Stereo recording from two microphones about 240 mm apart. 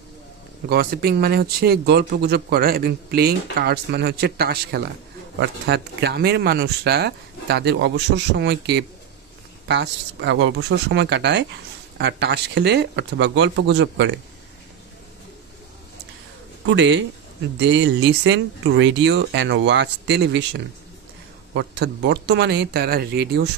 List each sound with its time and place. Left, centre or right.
0.7 s speech: right
16.6 s speech: right